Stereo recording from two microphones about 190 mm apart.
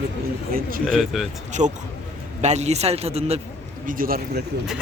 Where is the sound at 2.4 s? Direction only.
35° right (ahead or behind).